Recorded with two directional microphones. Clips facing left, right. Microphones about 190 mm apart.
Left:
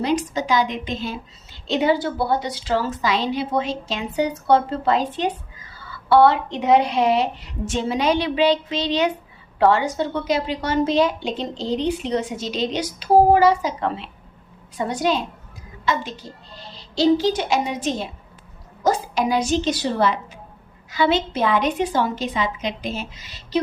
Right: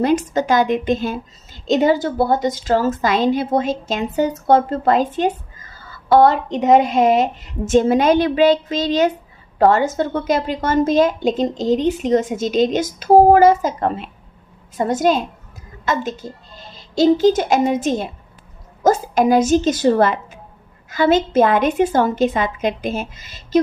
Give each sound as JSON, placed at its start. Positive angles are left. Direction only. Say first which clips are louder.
{"t": 0.0, "sound": "a woman's voice", "louder": "right 5 dB", "side_deg": -50}